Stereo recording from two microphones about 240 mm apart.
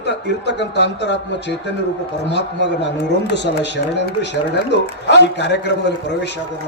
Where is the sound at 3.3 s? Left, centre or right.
Left.